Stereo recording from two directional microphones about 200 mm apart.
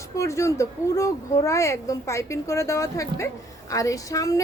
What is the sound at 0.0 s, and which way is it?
A woman's voice, 15° left (ahead or behind).